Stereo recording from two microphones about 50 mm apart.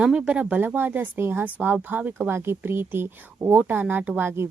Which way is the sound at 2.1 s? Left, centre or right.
Right.